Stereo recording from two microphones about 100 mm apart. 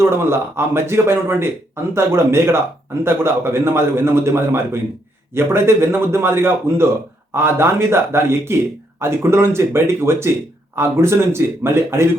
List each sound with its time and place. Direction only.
0.0 s speech: 25° right (ahead or behind)